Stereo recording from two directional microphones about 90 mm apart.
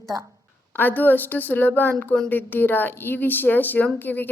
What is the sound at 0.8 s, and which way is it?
A woman's voice, 20° left (ahead or behind).